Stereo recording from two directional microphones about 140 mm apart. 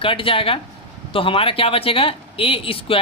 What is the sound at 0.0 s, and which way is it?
Speech, 40° left (ahead or behind).